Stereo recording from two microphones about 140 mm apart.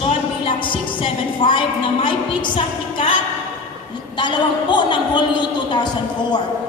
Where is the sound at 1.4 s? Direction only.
35° left (ahead or behind).